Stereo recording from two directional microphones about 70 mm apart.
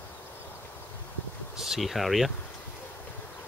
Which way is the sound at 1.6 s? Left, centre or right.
Centre.